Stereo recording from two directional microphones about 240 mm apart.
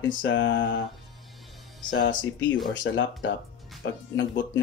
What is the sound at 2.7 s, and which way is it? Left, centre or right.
Speech, left.